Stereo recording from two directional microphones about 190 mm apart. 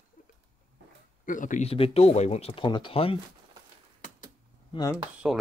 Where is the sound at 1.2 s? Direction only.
45° left (ahead or behind).